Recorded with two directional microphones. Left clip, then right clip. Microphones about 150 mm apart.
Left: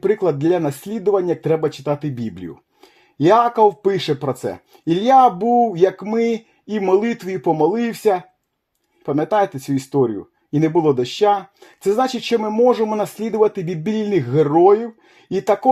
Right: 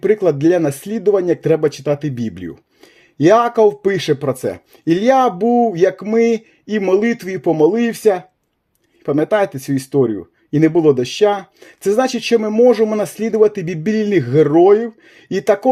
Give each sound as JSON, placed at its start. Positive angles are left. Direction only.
{"t": 0.0, "sound": "speech", "side_deg": -35}